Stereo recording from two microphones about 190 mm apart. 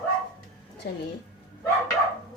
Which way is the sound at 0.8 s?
60° left (ahead or behind).